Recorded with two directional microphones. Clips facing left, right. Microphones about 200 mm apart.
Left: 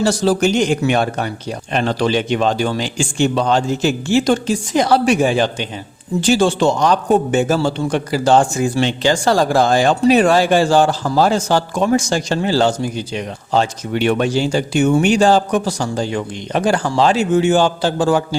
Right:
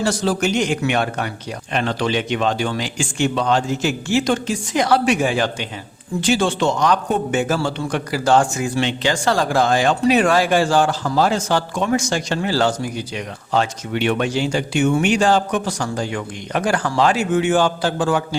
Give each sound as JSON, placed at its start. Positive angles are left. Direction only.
{"t": 0.0, "sound": "a man's voice", "side_deg": 30}